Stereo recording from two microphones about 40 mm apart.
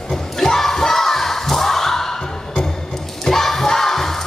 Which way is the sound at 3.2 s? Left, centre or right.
Centre.